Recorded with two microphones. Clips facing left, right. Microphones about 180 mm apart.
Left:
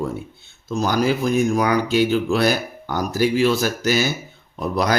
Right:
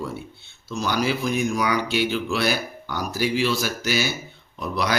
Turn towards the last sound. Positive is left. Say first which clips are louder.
# left 5 dB
turn(degrees=45)  # may be behind; listen again after turning